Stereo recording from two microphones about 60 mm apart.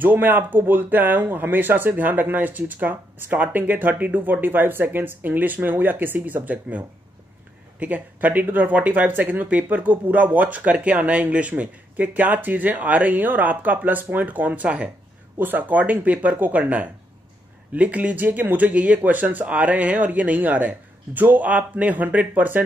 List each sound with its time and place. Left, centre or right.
0.0 s speech: right
7.8 s speech: right